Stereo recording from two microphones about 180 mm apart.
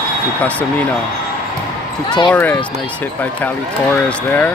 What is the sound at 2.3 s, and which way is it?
Speech, 10° left (ahead or behind).